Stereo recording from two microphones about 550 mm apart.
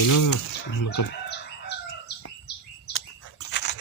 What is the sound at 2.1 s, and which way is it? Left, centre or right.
Bird, centre.